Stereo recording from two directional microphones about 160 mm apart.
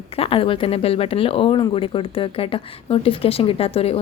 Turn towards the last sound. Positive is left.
turn(degrees=40)  # may be behind; listen again after turning